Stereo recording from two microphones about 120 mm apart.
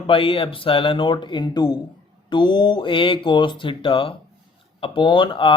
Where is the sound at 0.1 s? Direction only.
50° left (ahead or behind).